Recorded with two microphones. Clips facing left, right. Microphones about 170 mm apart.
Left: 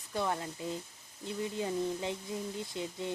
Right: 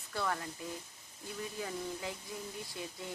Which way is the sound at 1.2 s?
25° left (ahead or behind).